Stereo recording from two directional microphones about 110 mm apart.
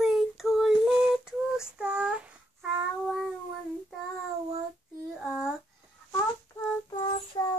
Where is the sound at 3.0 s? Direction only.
5° left (ahead or behind).